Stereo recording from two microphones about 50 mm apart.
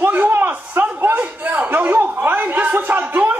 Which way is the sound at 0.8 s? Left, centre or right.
Right.